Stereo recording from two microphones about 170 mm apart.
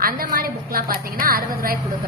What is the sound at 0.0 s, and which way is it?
A woman's voice, 60° right (ahead or behind).